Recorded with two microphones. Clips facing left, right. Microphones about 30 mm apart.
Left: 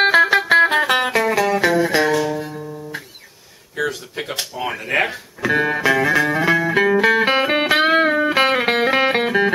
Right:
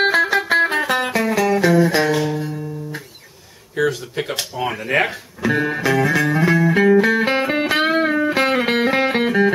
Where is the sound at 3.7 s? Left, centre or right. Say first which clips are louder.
Right 3 dB; centre.